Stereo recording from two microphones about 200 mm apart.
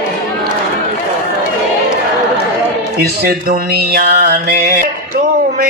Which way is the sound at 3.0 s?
50° right (ahead or behind).